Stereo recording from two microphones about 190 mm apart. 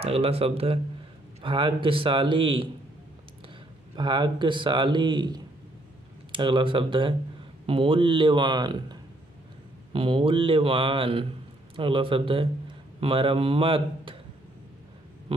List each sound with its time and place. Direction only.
0.0 s a man's voice: 30° right (ahead or behind)
3.9 s a man's voice: 25° right (ahead or behind)
9.9 s a man's voice: 25° right (ahead or behind)